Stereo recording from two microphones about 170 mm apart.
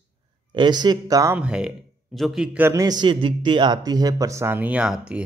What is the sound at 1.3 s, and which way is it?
Speech, 5° right (ahead or behind).